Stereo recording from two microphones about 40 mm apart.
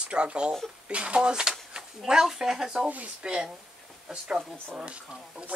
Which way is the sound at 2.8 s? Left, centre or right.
Right.